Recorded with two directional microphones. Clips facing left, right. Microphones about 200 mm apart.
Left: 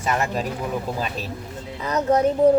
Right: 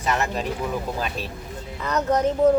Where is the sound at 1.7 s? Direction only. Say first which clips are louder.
Left 2 dB; 10° left (ahead or behind).